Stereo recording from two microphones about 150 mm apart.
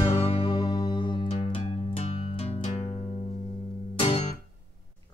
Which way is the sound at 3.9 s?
45° left (ahead or behind).